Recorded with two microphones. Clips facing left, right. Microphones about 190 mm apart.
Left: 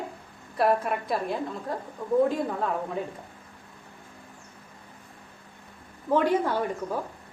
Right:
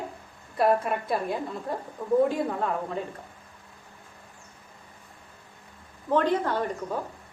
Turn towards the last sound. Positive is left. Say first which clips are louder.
# left 1 dB
turn(degrees=10)  # may be behind; listen again after turning